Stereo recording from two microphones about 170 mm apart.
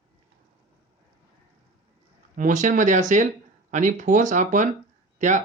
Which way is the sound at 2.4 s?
50° right (ahead or behind).